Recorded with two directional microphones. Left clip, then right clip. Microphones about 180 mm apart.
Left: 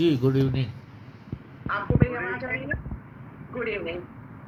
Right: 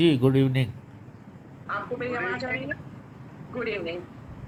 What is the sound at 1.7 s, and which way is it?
Fowl, 15° right (ahead or behind).